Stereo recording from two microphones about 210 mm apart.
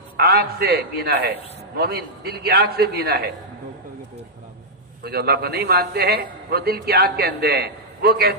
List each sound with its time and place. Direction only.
0.2 s a man's voice: 50° right (ahead or behind)
5.0 s a man's voice: 50° right (ahead or behind)